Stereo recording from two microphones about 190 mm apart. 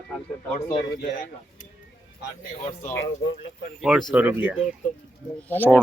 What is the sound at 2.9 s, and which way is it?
Speech, 75° left (ahead or behind).